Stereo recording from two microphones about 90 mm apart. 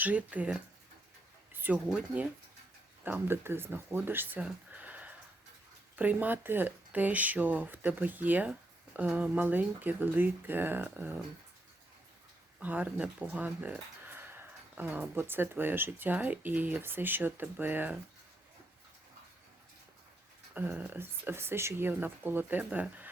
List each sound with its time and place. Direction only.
0.0 s speech: 15° right (ahead or behind)
1.5 s a sound: 20° right (ahead or behind)
1.9 s speech: 10° right (ahead or behind)
3.0 s speech: 25° right (ahead or behind)
4.4 s a sound: 15° right (ahead or behind)
6.0 s speech: 20° right (ahead or behind)
12.5 s speech: 15° right (ahead or behind)
20.5 s speech: 20° right (ahead or behind)